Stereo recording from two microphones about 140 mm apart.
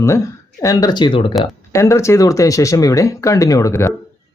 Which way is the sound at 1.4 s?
20° left (ahead or behind).